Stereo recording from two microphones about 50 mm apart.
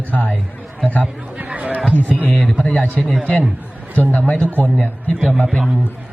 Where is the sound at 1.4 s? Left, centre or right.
Right.